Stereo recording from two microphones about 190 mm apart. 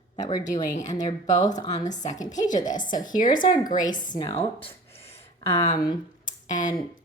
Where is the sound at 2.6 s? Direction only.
45° left (ahead or behind).